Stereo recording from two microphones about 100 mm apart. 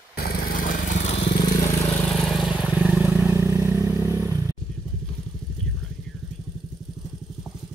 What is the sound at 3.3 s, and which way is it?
Vehicle, 25° right (ahead or behind).